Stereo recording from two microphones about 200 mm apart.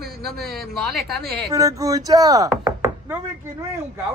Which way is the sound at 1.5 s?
15° right (ahead or behind).